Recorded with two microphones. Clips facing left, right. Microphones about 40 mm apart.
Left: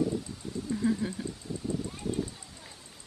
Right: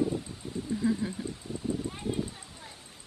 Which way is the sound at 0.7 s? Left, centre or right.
Centre.